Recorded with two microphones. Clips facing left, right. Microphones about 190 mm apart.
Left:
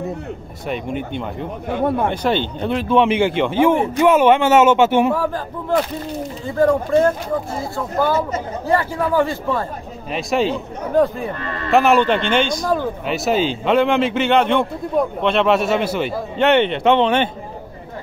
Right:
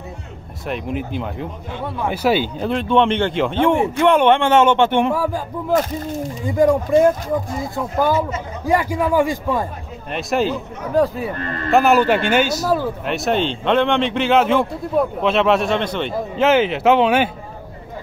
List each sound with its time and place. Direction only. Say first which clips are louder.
0.7 s speech: even; centre (ahead or behind)
1.7 s speech: left 11 dB; 55° left (ahead or behind)
2.0 s a man's voice: right 1 dB; 5° right (ahead or behind)
5.1 s a man's voice: even; 10° right (ahead or behind)
6.4 s a man's voice: right 1 dB; 15° right (ahead or behind)
10.1 s speech: left 1 dB; centre (ahead or behind)
11.3 s a man's voice: right 1 dB; 45° right (ahead or behind)
11.7 s speech: even; centre (ahead or behind)